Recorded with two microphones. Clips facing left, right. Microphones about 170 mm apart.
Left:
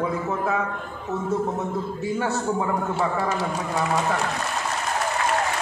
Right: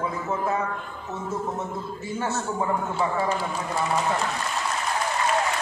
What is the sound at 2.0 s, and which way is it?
A man's voice, 65° left (ahead or behind).